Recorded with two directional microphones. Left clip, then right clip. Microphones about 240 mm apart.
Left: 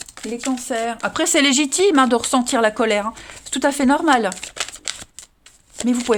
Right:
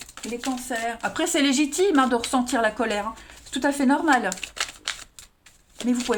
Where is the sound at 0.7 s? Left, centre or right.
Left.